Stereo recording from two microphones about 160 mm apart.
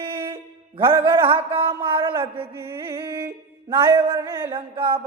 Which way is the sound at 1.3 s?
35° right (ahead or behind).